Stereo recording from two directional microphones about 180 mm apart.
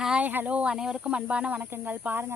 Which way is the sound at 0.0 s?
5° right (ahead or behind).